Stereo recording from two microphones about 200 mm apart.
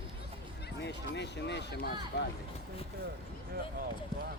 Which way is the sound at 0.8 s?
60° left (ahead or behind).